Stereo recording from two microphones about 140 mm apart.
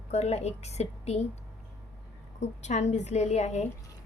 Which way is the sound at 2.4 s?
55° left (ahead or behind).